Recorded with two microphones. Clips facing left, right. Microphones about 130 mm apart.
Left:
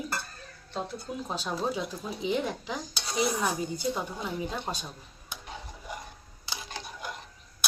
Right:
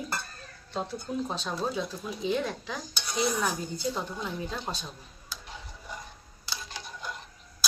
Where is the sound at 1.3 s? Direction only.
10° left (ahead or behind).